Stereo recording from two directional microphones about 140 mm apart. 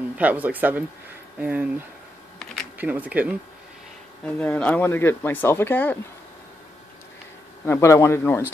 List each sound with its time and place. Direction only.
0.2 s speech: 10° right (ahead or behind)
2.8 s speech: 10° right (ahead or behind)
4.4 s speech: 10° left (ahead or behind)
7.6 s speech: 20° left (ahead or behind)